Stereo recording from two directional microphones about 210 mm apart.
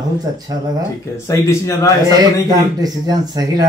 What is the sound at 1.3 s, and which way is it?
Speech, 15° left (ahead or behind).